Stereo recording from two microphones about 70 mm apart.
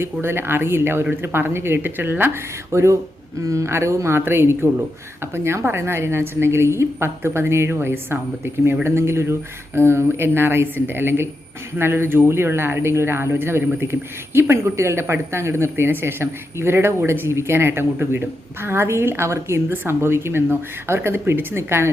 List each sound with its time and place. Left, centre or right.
0.0 s speech: right